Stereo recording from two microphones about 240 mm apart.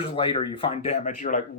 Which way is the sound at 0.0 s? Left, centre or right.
Left.